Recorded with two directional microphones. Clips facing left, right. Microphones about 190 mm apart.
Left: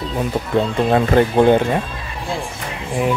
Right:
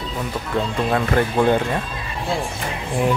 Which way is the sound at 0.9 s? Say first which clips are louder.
Left 5 dB; 25° left (ahead or behind).